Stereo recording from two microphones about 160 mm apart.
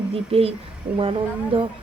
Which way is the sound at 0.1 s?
35° right (ahead or behind).